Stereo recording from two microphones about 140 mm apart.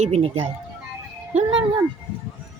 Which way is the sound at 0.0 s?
45° right (ahead or behind).